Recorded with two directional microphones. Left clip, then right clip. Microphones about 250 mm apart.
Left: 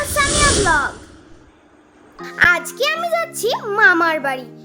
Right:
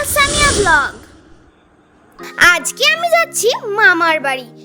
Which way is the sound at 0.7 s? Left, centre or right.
Right.